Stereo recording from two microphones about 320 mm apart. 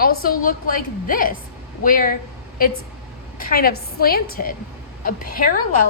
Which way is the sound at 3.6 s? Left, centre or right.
Left.